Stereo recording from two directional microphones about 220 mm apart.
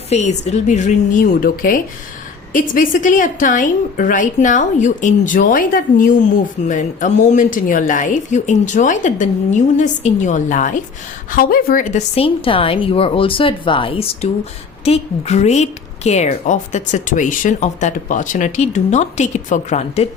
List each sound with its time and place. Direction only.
0.1 s a woman's voice: 30° left (ahead or behind)